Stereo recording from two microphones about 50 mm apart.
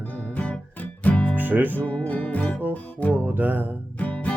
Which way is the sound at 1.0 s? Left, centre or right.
Left.